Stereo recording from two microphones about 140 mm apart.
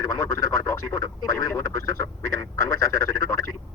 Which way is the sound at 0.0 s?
20° left (ahead or behind).